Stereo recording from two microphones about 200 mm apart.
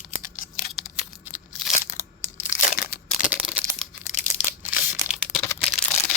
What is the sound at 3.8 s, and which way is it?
Crumpling, centre (ahead or behind).